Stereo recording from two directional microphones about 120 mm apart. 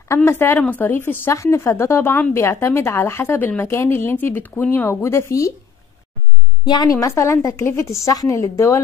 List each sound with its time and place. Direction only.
0.1 s speech: 20° left (ahead or behind)
6.6 s speech: 35° left (ahead or behind)